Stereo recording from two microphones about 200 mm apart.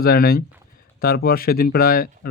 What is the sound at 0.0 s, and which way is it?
Speech, 50° left (ahead or behind).